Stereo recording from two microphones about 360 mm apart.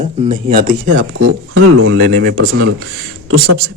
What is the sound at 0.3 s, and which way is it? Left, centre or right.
Speech, right.